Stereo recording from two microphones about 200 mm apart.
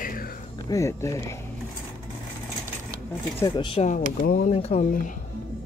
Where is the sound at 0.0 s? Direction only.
45° left (ahead or behind).